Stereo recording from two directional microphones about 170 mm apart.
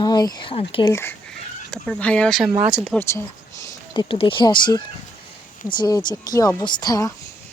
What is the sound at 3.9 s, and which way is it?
Speech, 30° left (ahead or behind).